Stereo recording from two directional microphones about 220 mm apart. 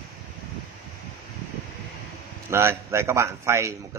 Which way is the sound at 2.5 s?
10° right (ahead or behind).